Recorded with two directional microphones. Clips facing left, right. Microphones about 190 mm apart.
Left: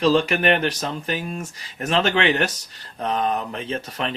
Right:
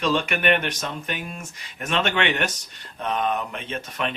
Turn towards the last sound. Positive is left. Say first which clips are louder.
# left 2 dB
turn(degrees=35)  # may be behind; listen again after turning